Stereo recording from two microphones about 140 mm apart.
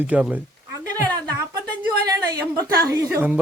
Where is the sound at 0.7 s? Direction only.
25° right (ahead or behind).